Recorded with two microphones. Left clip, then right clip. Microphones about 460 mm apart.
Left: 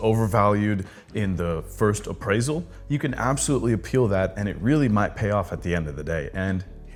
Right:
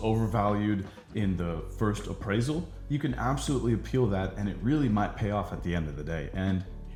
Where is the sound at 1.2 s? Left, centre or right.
Left.